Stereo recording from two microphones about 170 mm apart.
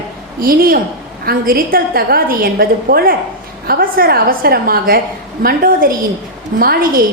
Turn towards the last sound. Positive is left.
turn(degrees=-60)  # may be behind; listen again after turning